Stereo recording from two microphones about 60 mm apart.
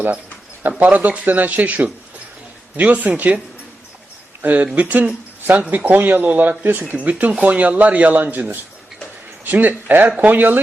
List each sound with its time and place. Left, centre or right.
0.9 s speech: right
4.4 s speech: right
6.8 s speech: right